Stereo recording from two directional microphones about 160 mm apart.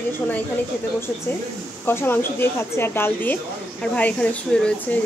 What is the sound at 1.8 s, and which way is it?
Speech, 15° left (ahead or behind).